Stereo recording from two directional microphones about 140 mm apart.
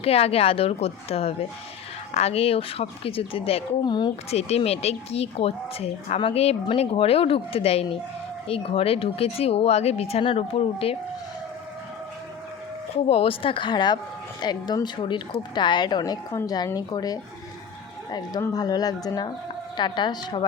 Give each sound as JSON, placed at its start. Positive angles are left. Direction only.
{"t": 0.0, "sound": "speech", "side_deg": 45}
{"t": 13.1, "sound": "speech", "side_deg": 45}